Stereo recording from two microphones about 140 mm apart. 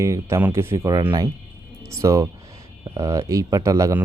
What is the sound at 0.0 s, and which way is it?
Speech, 20° right (ahead or behind).